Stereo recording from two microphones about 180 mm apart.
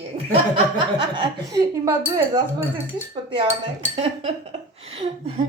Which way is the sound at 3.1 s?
25° right (ahead or behind).